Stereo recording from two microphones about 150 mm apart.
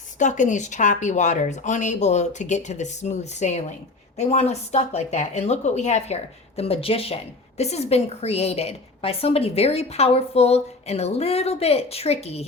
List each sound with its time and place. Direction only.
0.2 s a woman's voice: 55° left (ahead or behind)